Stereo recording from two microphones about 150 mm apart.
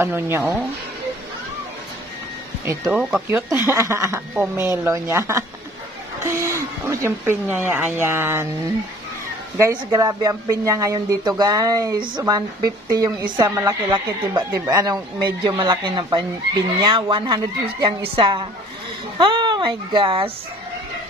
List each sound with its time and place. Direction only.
0.0 s speech: 15° right (ahead or behind)
2.6 s speech: 20° right (ahead or behind)
2.9 s speech: centre (ahead or behind)
3.3 s speech: 15° right (ahead or behind)
9.8 s a woman's voice: 25° right (ahead or behind)